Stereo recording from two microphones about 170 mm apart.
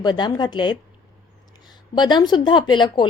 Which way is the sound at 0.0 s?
25° left (ahead or behind).